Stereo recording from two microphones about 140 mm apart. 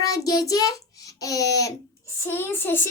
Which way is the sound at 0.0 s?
25° left (ahead or behind).